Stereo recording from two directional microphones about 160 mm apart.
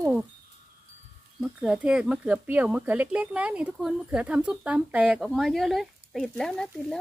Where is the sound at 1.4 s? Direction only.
5° right (ahead or behind).